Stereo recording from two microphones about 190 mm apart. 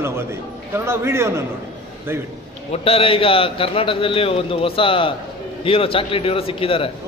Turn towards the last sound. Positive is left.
turn(degrees=30)  # may be behind; listen again after turning